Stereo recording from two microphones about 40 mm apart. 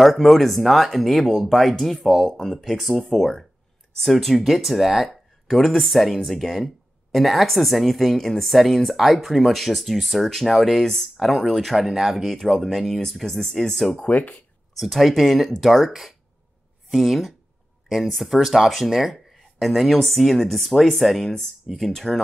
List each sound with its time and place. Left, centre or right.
0.0 s speech: centre
11.1 s speech: centre
14.0 s speech: left
14.8 s speech: centre